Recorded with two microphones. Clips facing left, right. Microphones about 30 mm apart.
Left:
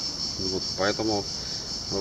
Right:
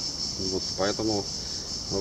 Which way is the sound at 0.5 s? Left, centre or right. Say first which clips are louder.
Left 1 dB; centre.